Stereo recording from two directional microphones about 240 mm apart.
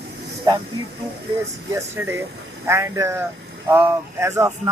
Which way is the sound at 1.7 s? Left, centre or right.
Centre.